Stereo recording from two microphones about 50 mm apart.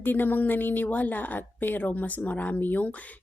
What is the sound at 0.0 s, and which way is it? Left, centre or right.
A woman's voice, left.